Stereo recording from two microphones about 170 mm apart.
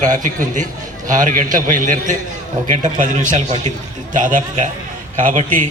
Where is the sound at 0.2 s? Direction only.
50° right (ahead or behind).